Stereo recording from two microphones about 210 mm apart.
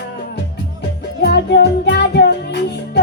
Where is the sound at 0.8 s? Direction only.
50° left (ahead or behind).